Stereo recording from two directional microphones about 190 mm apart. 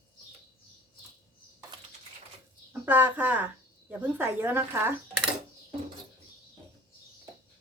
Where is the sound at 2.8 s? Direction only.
10° right (ahead or behind).